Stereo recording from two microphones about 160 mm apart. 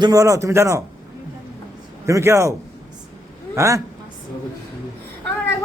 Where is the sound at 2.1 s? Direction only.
20° right (ahead or behind).